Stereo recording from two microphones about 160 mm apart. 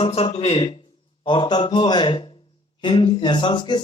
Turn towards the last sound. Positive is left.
turn(degrees=30)  # may be behind; listen again after turning